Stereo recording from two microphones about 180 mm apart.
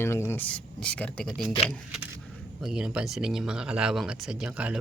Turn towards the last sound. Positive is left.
turn(degrees=-10)  # may be behind; listen again after turning